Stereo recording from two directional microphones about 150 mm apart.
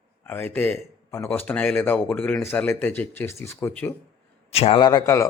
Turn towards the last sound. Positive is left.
turn(degrees=20)  # may be behind; listen again after turning